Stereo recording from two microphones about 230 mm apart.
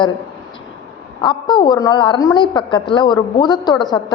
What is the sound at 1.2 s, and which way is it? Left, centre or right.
A woman's voice, centre.